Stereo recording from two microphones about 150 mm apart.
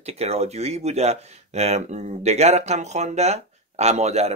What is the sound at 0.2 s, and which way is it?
Speech, 45° right (ahead or behind).